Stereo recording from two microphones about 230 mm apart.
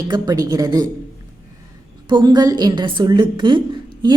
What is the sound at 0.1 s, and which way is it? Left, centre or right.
Speech, centre.